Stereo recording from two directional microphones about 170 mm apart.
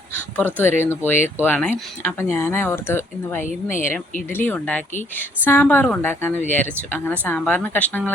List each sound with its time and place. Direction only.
0.1 s a sound: 10° left (ahead or behind)
0.8 s speech: 10° left (ahead or behind)
3.4 s speech: 50° left (ahead or behind)
4.3 s speech: 10° left (ahead or behind)